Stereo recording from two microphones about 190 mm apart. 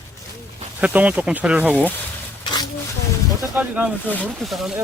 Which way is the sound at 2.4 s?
20° left (ahead or behind).